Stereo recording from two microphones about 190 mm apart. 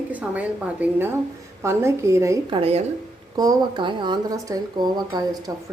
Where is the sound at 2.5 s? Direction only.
30° right (ahead or behind).